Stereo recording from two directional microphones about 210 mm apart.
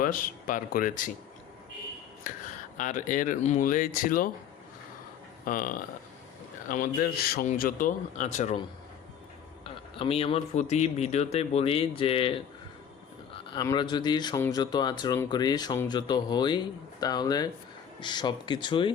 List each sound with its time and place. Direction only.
0.0 s a man's voice: 40° left (ahead or behind)
2.3 s a man's voice: 40° left (ahead or behind)
5.5 s a man's voice: 40° left (ahead or behind)
10.0 s speech: 25° left (ahead or behind)
13.5 s speech: 20° left (ahead or behind)